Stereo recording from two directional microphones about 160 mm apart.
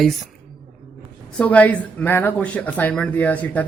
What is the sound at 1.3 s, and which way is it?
Speech, 10° left (ahead or behind).